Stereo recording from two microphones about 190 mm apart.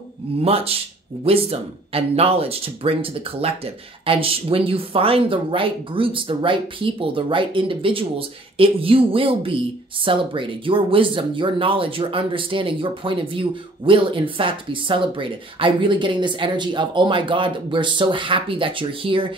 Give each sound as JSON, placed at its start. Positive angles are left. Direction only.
{"t": 0.4, "sound": "speech", "side_deg": -30}